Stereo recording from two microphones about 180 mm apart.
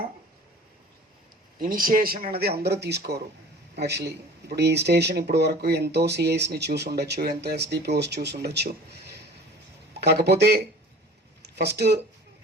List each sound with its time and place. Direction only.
1.5 s speech: 50° right (ahead or behind)
10.0 s speech: 65° right (ahead or behind)